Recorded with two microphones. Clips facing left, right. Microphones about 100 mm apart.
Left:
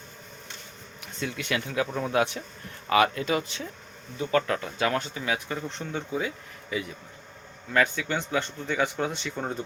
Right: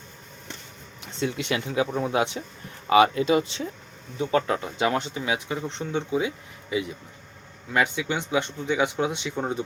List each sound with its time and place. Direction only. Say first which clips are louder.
1.0 s speech: right 5 dB; 25° right (ahead or behind)